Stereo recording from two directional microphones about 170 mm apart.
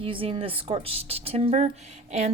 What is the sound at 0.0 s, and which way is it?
A woman's voice, 30° right (ahead or behind).